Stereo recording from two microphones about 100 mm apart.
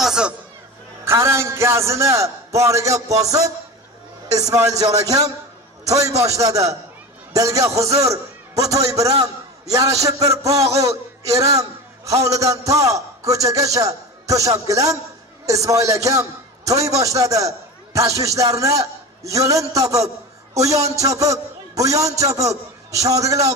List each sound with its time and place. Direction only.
0.0 s speech: 5° right (ahead or behind)
1.0 s a man's voice: 30° right (ahead or behind)